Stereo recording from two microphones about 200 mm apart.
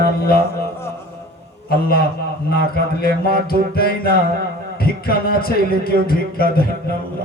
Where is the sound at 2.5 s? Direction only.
50° left (ahead or behind).